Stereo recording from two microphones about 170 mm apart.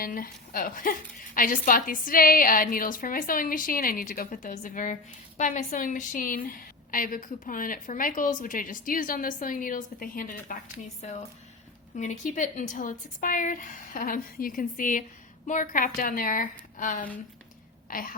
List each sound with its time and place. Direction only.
0.0 s a woman's voice: 55° left (ahead or behind)
11.0 s a woman's voice: 40° left (ahead or behind); by 18.1 s 55° left (ahead or behind)